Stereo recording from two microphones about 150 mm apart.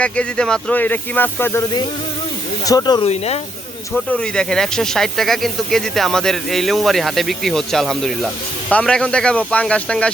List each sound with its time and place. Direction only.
0.0 s speech: 5° left (ahead or behind)
2.6 s speech: 25° left (ahead or behind)
3.0 s speech: 45° left (ahead or behind)
3.9 s speech: 5° left (ahead or behind)